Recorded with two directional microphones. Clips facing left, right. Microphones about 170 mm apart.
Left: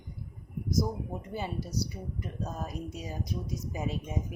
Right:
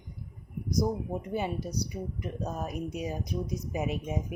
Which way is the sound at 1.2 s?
15° right (ahead or behind).